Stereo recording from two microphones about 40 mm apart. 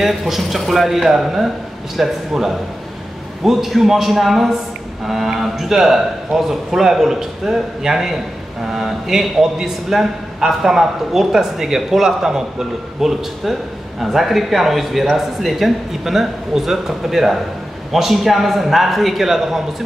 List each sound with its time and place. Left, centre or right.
0.0 s a man's voice: centre